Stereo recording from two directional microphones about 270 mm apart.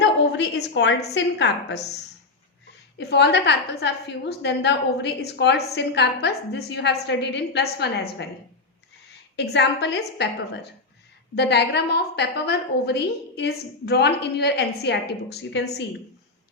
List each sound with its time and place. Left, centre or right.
0.0 s a woman's voice: left
3.0 s a woman's voice: left
9.3 s a woman's voice: left